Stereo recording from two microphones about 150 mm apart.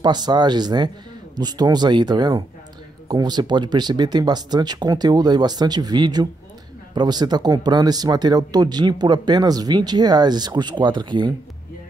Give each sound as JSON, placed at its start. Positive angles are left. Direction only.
{"t": 0.0, "sound": "speech", "side_deg": -30}